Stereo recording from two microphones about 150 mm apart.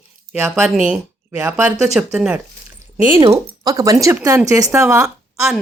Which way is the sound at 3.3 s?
25° right (ahead or behind).